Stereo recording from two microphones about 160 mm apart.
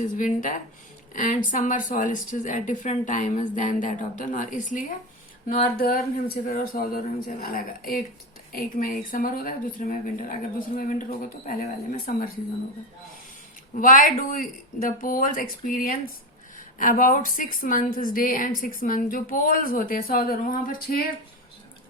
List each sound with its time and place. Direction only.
0.0 s speech: 55° left (ahead or behind)
5.5 s a woman's voice: 65° left (ahead or behind)
11.4 s a woman's voice: 65° left (ahead or behind)
13.7 s a woman's voice: 55° left (ahead or behind)